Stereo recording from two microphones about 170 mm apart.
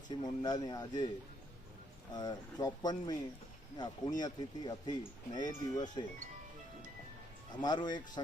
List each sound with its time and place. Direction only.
0.1 s speech: 25° left (ahead or behind)
2.1 s speech: 25° left (ahead or behind)
7.6 s speech: 25° left (ahead or behind)